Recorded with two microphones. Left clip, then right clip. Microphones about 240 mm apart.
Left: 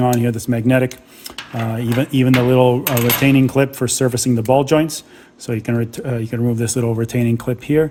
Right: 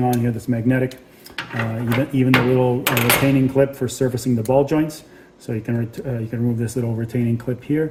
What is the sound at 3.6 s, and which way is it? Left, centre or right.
Speech, left.